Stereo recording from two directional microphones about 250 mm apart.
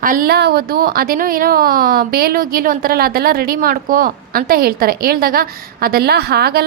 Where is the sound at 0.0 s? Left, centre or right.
Right.